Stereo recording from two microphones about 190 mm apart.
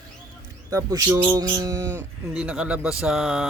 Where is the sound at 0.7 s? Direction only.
15° right (ahead or behind).